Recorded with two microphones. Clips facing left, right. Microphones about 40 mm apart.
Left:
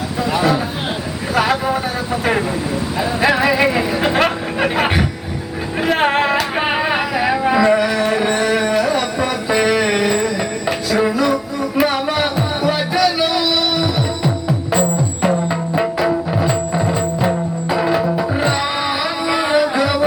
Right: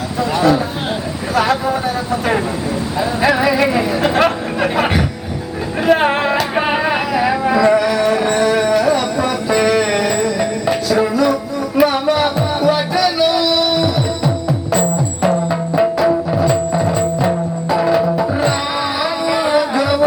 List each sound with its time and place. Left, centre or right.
0.2 s a sound: centre
1.4 s vehicle: centre
3.0 s speech: centre
5.8 s music: centre
6.6 s music: centre
15.4 s music: centre
19.3 s music: centre